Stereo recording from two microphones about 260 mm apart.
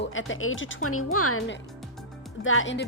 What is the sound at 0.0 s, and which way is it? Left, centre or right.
A woman's voice, left.